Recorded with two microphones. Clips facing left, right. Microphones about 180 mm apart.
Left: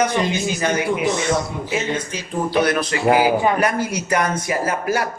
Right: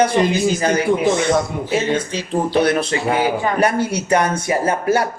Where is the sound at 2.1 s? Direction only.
30° right (ahead or behind).